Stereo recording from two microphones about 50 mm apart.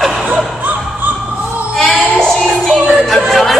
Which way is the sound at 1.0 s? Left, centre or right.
Right.